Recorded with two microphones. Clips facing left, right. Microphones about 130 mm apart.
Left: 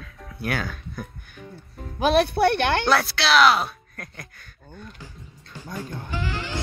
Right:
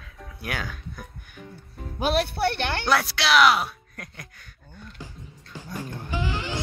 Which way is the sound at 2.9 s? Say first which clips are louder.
Left 2 dB; 15° right (ahead or behind).